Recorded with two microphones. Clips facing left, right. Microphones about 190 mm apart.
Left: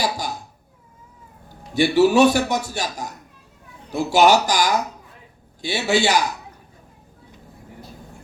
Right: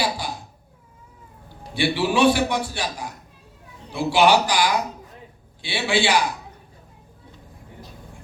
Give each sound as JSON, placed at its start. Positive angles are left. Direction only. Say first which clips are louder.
{"t": 1.5, "sound": "a man's voice", "louder": "left 4 dB", "side_deg": 45}